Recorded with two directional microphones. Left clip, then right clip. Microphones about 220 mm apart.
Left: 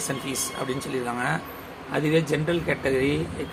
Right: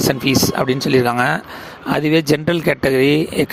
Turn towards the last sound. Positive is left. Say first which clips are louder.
# right 9 dB
turn(degrees=-45)  # may be behind; listen again after turning